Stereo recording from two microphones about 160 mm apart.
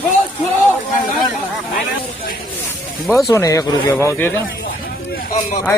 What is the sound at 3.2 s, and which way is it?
Speech, 20° left (ahead or behind).